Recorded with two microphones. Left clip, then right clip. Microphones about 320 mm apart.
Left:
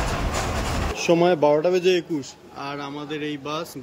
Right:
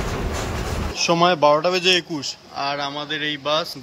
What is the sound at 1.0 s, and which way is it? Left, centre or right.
Speech, centre.